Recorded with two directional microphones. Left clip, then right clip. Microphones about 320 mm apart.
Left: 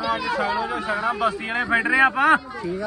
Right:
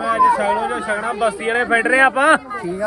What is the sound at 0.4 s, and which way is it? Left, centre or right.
Speech, centre.